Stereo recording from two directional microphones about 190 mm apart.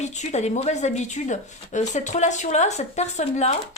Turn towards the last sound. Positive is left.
turn(degrees=35)  # may be behind; listen again after turning